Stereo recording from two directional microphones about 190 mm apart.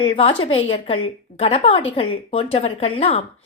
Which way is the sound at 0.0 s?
25° left (ahead or behind).